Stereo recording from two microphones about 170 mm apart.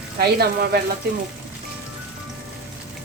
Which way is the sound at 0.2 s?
70° right (ahead or behind).